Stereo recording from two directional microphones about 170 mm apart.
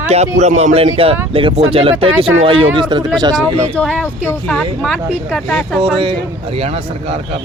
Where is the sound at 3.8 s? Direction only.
5° left (ahead or behind).